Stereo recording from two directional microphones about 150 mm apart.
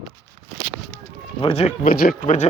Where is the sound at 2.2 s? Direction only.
55° left (ahead or behind).